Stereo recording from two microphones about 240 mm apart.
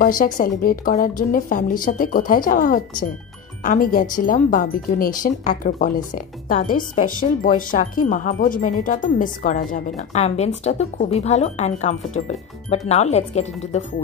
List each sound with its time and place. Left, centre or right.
0.0 s speech: left